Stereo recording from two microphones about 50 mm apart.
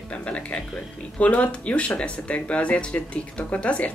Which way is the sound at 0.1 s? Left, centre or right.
Left.